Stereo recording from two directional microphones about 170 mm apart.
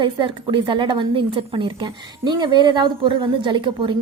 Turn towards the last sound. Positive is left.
turn(degrees=-30)  # may be behind; listen again after turning